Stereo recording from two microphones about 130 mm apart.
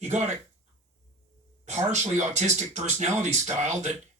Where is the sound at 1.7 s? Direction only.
60° right (ahead or behind).